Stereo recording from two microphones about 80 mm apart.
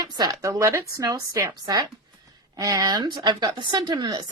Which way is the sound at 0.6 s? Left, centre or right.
Right.